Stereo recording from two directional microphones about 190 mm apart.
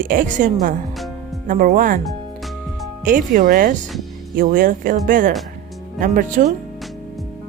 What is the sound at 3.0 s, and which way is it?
Speech, 45° right (ahead or behind).